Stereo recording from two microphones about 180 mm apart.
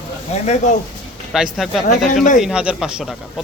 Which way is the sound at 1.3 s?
Centre (ahead or behind).